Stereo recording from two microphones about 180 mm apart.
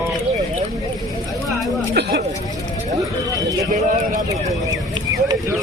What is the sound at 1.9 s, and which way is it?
Speech, 65° right (ahead or behind).